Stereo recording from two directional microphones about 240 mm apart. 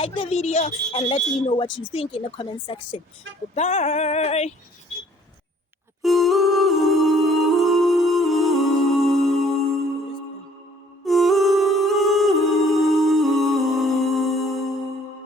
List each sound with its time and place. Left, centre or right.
0.0 s speech: left
6.0 s music: centre
11.0 s music: centre